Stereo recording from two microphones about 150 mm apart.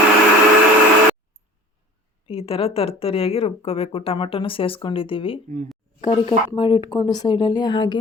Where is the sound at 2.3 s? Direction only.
40° left (ahead or behind).